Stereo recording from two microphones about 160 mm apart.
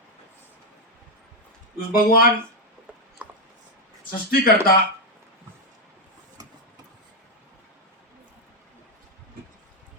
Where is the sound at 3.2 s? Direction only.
10° right (ahead or behind).